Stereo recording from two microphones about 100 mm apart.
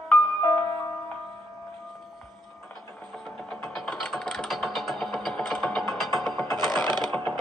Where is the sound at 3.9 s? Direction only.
5° left (ahead or behind).